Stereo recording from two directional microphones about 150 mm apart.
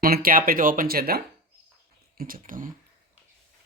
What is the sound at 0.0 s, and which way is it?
Speech, 75° right (ahead or behind).